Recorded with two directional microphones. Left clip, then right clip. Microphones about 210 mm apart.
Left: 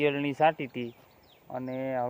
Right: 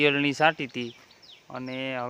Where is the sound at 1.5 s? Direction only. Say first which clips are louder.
Even; 20° right (ahead or behind).